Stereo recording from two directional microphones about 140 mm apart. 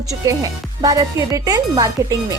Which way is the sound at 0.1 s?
25° right (ahead or behind).